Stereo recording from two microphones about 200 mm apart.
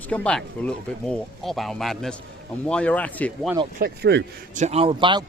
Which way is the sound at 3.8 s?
55° right (ahead or behind).